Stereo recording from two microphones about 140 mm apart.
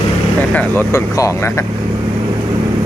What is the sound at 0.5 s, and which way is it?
Speech, 15° left (ahead or behind).